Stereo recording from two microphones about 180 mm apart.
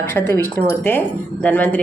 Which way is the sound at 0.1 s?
15° left (ahead or behind).